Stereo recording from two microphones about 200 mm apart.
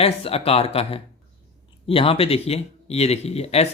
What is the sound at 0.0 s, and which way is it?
Speech, 30° left (ahead or behind).